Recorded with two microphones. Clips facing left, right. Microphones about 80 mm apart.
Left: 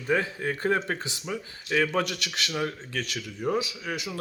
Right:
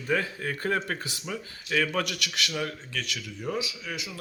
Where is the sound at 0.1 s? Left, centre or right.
Centre.